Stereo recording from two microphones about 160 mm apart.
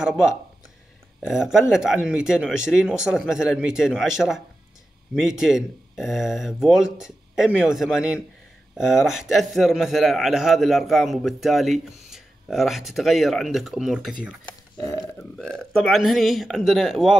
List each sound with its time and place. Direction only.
0.0 s a man's voice: 5° right (ahead or behind)
14.8 s speech: 20° left (ahead or behind)
15.1 s a man's voice: 5° left (ahead or behind)